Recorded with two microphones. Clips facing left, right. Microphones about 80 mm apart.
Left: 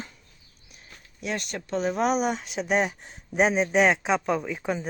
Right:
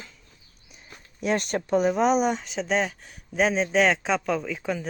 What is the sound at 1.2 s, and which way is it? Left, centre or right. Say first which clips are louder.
Speech: right 6 dB; right.